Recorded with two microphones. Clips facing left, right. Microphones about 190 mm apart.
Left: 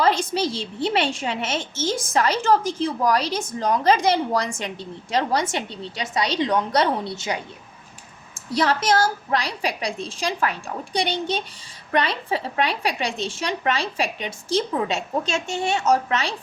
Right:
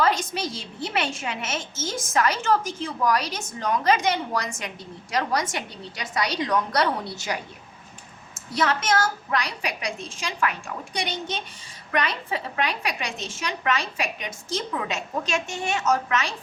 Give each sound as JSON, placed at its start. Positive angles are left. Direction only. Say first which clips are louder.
{"t": 0.0, "sound": "a woman's voice", "louder": "left 3 dB", "side_deg": 30}
{"t": 8.5, "sound": "a woman's voice", "louder": "left 3 dB", "side_deg": 35}